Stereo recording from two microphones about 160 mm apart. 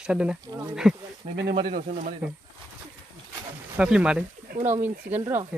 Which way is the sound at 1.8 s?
55° right (ahead or behind).